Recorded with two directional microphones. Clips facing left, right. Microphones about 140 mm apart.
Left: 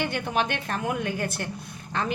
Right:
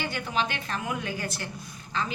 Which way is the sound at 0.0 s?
55° left (ahead or behind).